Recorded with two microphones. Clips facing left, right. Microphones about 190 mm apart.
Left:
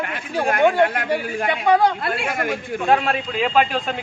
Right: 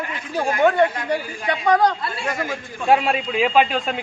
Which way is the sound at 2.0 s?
60° left (ahead or behind).